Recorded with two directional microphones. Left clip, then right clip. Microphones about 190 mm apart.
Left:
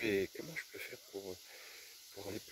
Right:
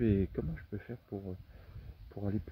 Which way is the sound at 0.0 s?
35° left (ahead or behind).